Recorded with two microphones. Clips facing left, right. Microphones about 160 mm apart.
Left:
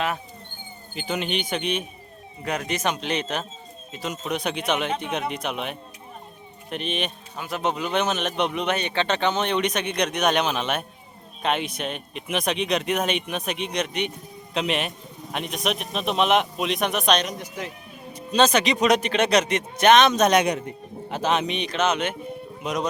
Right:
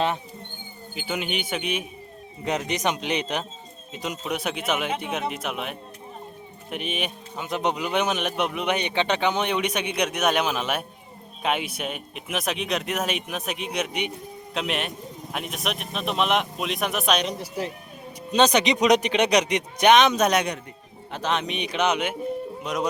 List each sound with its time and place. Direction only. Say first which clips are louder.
0.9 s a man's voice: left 2 dB; 5° right (ahead or behind)
2.4 s a man's voice: right 1 dB; 20° right (ahead or behind); by 17.2 s 5° right (ahead or behind)
17.2 s speech: right 3 dB; 30° right (ahead or behind)
18.3 s a man's voice: even; 20° right (ahead or behind)
21.1 s a man's voice: left 3 dB; 5° left (ahead or behind); by 22.1 s 15° right (ahead or behind)